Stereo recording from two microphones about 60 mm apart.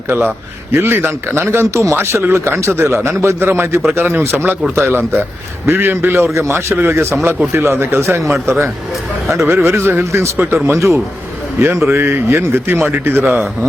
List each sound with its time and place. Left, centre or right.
0.1 s a man's voice: right
4.2 s a man's voice: right